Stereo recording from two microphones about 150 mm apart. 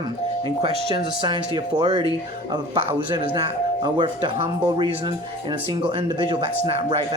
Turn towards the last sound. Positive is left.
turn(degrees=-40)  # may be behind; listen again after turning